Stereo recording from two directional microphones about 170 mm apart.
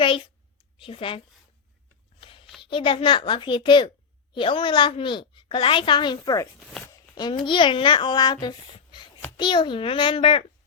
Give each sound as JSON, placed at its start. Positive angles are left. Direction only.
{"t": 0.8, "sound": "a woman's voice", "side_deg": 30}
{"t": 2.2, "sound": "a sound", "side_deg": 30}
{"t": 2.6, "sound": "a woman's voice", "side_deg": 30}
{"t": 6.6, "sound": "speech", "side_deg": 0}
{"t": 7.2, "sound": "a woman's voice", "side_deg": 25}